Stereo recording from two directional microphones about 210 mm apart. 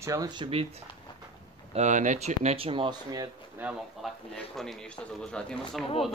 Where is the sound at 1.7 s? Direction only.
35° right (ahead or behind); by 3.6 s 15° right (ahead or behind).